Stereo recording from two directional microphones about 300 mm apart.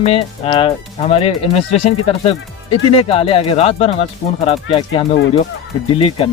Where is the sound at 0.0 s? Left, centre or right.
Centre.